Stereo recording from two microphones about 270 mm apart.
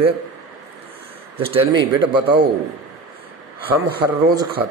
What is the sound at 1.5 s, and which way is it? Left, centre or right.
Speech, centre.